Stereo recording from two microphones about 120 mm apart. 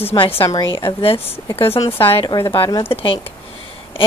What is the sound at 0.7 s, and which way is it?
A woman's voice, 50° left (ahead or behind).